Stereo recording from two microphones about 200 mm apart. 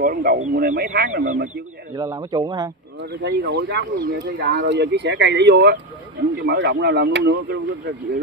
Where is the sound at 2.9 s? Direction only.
55° right (ahead or behind).